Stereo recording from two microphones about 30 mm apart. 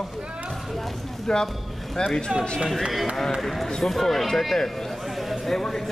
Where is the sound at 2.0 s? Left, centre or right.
Left.